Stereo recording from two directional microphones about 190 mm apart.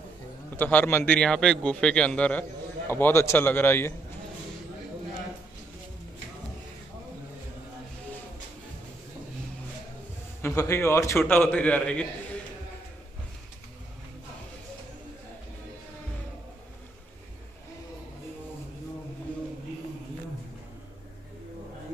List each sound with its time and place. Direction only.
0.5 s a man's voice: 10° left (ahead or behind)
10.4 s a man's voice: 15° left (ahead or behind)
19.3 s a sound: 10° left (ahead or behind)